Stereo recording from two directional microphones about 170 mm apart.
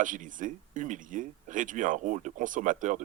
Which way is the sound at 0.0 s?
50° right (ahead or behind).